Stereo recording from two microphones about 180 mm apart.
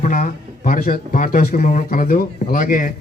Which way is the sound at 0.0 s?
45° left (ahead or behind).